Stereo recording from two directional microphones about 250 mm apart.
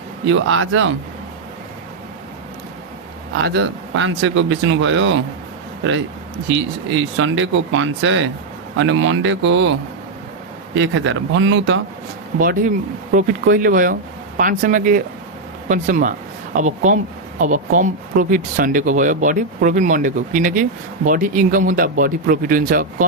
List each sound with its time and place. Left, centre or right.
0.3 s speech: right
3.3 s speech: right
6.9 s speech: right
10.8 s speech: right
12.4 s speech: right